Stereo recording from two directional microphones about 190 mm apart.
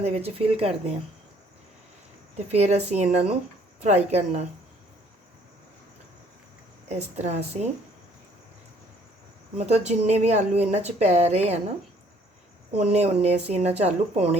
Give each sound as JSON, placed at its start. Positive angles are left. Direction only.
{"t": 0.0, "sound": "speech", "side_deg": -35}
{"t": 2.5, "sound": "speech", "side_deg": -35}
{"t": 6.8, "sound": "speech", "side_deg": -35}
{"t": 9.6, "sound": "speech", "side_deg": -35}
{"t": 12.7, "sound": "speech", "side_deg": -35}